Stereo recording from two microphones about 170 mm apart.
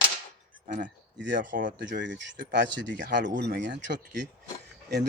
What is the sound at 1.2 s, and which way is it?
Speech, 90° right.